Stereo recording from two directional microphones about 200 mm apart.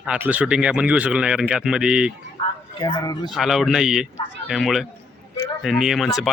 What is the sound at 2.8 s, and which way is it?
Speech, 20° left (ahead or behind).